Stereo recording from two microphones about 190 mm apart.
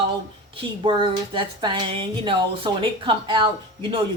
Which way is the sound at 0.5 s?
25° right (ahead or behind).